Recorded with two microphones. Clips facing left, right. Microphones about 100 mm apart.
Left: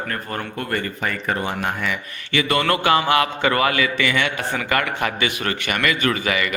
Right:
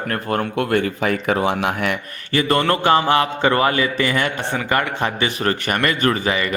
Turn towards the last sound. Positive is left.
turn(degrees=-30)  # may be behind; listen again after turning